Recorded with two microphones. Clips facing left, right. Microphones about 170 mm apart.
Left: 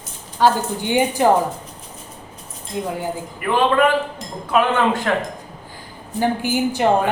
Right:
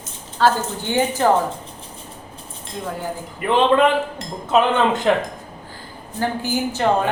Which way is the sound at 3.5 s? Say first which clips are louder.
Right 1 dB; 25° right (ahead or behind).